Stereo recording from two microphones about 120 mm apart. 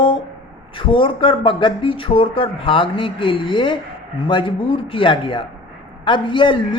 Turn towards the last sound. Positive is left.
turn(degrees=45)  # may be behind; listen again after turning